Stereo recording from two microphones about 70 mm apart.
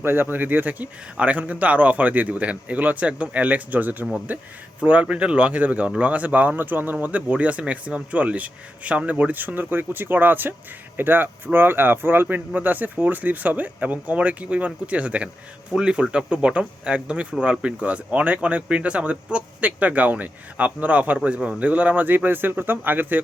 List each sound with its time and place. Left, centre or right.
0.0 s speech: right